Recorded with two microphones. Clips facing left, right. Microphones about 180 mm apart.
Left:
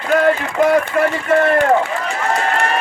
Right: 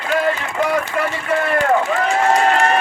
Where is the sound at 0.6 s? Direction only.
50° left (ahead or behind).